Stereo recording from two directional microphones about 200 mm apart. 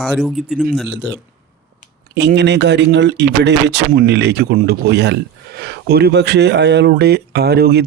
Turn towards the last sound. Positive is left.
turn(degrees=-50)  # may be behind; listen again after turning